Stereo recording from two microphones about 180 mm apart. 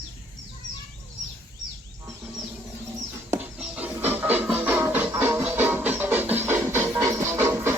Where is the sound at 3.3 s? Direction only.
5° right (ahead or behind).